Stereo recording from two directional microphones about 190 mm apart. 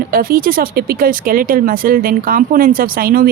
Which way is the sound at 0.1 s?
50° right (ahead or behind).